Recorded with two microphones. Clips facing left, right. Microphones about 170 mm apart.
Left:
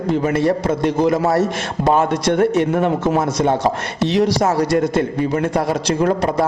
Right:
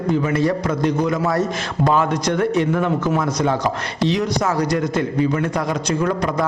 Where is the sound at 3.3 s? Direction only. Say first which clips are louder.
Left 3 dB; 25° left (ahead or behind).